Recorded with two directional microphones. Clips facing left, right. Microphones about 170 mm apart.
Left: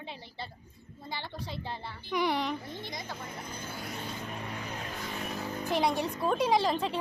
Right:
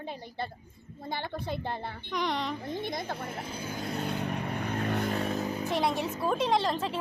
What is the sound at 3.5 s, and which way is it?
Vehicle, 10° right (ahead or behind).